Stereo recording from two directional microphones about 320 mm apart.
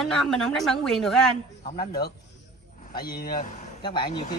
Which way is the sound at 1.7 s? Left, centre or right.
Centre.